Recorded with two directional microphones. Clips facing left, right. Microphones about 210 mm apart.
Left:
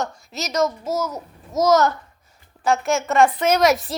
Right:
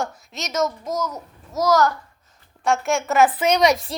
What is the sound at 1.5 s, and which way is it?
Speech, 20° left (ahead or behind).